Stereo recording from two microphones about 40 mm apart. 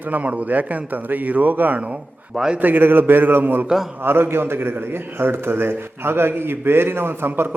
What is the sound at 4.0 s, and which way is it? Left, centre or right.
A man's voice, right.